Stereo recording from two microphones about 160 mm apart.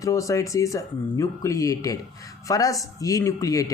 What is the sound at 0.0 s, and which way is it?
Speech, 20° left (ahead or behind).